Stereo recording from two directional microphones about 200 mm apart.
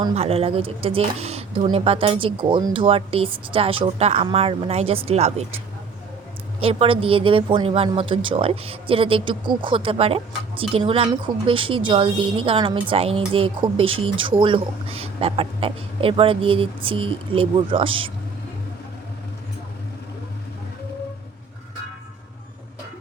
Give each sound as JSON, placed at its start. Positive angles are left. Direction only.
{"t": 0.0, "sound": "a woman's voice", "side_deg": -30}
{"t": 6.6, "sound": "a woman's voice", "side_deg": -30}